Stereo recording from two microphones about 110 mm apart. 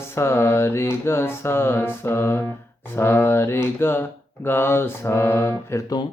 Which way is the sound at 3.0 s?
20° left (ahead or behind).